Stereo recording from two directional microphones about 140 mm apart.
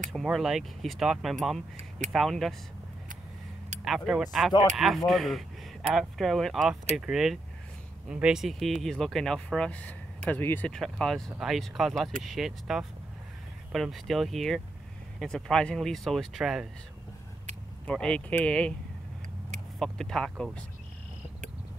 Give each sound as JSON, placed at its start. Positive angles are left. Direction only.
{"t": 0.1, "sound": "speech", "side_deg": 0}
{"t": 3.8, "sound": "speech", "side_deg": -5}
{"t": 17.8, "sound": "speech", "side_deg": 5}
{"t": 19.8, "sound": "speech", "side_deg": 5}